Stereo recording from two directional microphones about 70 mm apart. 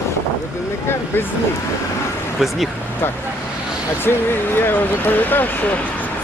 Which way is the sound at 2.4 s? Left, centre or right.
Centre.